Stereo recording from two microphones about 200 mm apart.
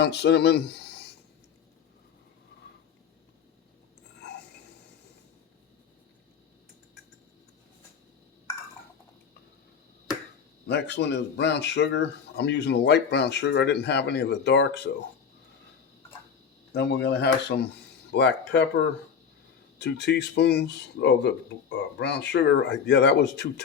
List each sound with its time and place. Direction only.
0.0 s speech: 60° left (ahead or behind)
10.7 s speech: 60° left (ahead or behind)
16.7 s speech: 55° left (ahead or behind)
19.8 s speech: 60° left (ahead or behind)